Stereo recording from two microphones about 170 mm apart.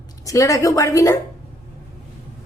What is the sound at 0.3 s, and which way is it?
Speech, 20° left (ahead or behind).